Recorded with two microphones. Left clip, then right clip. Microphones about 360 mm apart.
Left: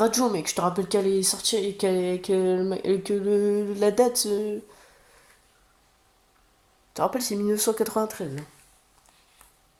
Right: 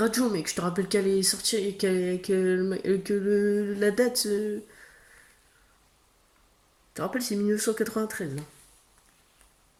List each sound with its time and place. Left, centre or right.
0.0 s speech: centre
6.9 s speech: centre